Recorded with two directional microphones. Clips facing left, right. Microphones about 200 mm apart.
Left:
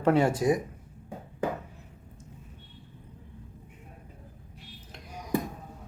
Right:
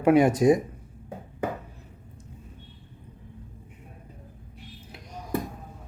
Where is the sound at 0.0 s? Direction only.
15° right (ahead or behind).